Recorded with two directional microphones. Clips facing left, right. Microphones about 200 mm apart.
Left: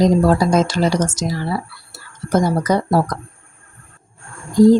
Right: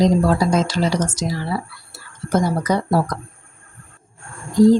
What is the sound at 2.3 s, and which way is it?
Speech, 40° left (ahead or behind).